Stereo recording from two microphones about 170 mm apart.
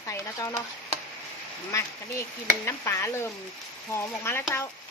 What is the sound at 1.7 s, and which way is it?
Speech, 15° left (ahead or behind).